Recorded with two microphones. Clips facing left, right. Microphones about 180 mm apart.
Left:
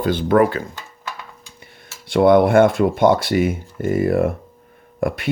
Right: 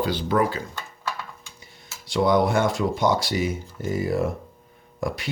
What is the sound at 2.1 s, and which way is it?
Speech, 60° left (ahead or behind).